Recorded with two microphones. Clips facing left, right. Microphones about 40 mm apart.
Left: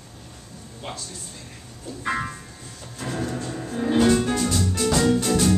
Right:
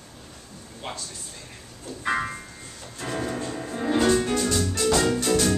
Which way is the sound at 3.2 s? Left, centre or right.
Centre.